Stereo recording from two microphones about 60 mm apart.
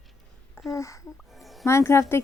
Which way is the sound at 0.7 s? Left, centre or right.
Left.